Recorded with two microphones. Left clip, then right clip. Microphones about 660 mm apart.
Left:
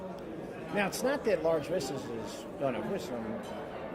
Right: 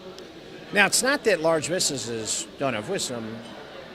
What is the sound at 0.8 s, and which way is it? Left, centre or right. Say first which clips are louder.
A man's voice: right 10 dB; right.